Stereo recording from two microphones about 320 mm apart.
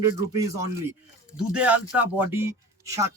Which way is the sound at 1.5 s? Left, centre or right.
Centre.